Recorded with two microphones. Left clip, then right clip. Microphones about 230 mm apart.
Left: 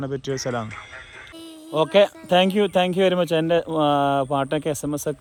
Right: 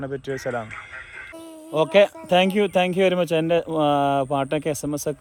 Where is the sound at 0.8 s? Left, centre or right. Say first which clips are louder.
Right 2 dB; centre.